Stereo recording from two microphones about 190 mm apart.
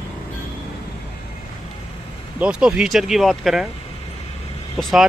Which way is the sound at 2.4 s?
5° right (ahead or behind).